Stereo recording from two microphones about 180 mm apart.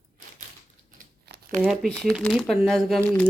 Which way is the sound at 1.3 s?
65° right (ahead or behind).